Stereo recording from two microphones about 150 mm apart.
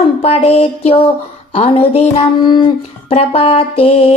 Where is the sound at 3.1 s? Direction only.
40° left (ahead or behind).